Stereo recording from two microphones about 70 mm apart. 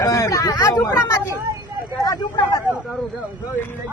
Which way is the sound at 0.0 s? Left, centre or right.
Left.